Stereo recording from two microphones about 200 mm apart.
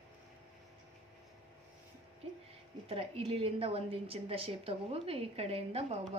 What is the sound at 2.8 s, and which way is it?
A woman's voice, 30° right (ahead or behind).